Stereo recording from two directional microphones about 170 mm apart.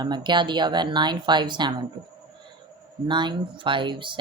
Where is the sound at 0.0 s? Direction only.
25° right (ahead or behind).